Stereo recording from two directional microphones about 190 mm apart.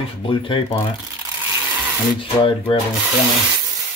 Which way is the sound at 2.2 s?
25° left (ahead or behind).